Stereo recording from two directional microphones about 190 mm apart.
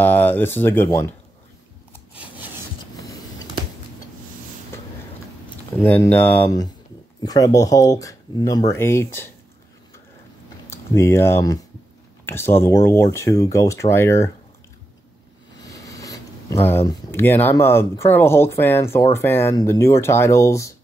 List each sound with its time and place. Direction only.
0.0 s speech: 10° left (ahead or behind)
2.1 s rub: 10° right (ahead or behind)
5.8 s speech: 10° left (ahead or behind)
10.7 s speech: 15° left (ahead or behind)
15.6 s speech: 15° left (ahead or behind)